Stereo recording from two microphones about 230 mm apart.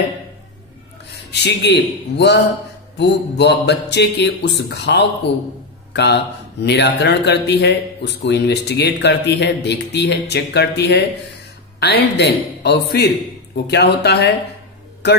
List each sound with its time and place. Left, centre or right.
1.3 s speech: left